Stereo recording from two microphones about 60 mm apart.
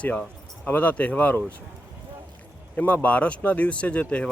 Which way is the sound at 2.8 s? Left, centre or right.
Left.